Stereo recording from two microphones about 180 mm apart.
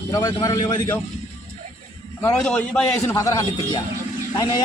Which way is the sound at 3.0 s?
15° left (ahead or behind).